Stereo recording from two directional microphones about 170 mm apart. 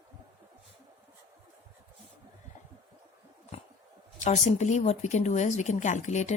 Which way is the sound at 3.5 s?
40° left (ahead or behind).